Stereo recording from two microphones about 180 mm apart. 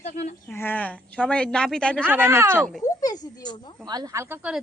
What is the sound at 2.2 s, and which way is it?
Speech, 15° right (ahead or behind).